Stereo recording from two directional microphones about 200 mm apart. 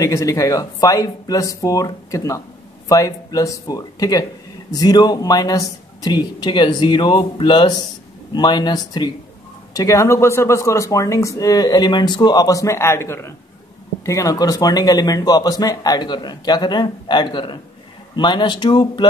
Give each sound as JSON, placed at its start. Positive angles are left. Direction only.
{"t": 0.0, "sound": "a man's voice", "side_deg": 15}